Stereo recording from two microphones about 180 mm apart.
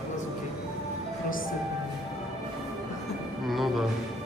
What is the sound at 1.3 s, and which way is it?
Music, 50° left (ahead or behind).